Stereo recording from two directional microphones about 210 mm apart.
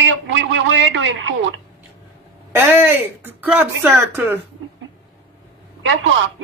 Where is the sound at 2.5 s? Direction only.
10° right (ahead or behind).